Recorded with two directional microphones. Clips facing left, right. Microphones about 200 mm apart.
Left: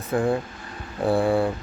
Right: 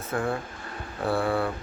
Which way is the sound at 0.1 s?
15° left (ahead or behind).